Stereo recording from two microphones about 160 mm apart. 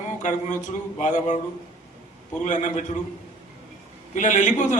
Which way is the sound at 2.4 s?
50° left (ahead or behind).